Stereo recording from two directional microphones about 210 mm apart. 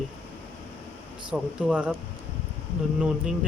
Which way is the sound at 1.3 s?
5° right (ahead or behind).